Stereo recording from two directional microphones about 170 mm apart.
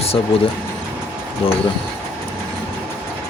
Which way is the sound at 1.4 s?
35° left (ahead or behind).